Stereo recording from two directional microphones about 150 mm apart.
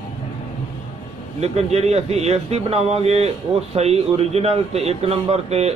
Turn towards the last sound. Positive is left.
turn(degrees=-45)  # may be behind; listen again after turning